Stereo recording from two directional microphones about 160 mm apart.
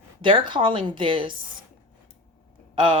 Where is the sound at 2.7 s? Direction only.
30° right (ahead or behind).